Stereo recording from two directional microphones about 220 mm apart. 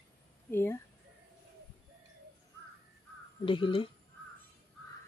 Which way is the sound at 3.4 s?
20° left (ahead or behind).